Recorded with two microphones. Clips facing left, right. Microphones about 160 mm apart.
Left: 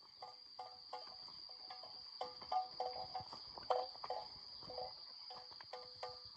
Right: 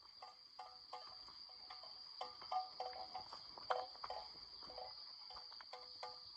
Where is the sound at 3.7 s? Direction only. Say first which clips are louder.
Left 5 dB; 30° left (ahead or behind).